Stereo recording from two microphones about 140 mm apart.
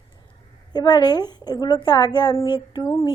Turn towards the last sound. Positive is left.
turn(degrees=20)  # may be behind; listen again after turning